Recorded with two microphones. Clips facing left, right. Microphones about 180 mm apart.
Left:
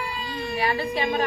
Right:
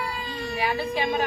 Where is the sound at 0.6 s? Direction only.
10° right (ahead or behind).